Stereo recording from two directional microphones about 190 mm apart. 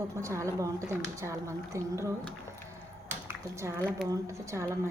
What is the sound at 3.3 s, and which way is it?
A woman's voice, 15° right (ahead or behind).